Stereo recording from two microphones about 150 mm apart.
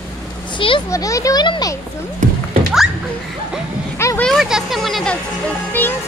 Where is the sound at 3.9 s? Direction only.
15° left (ahead or behind).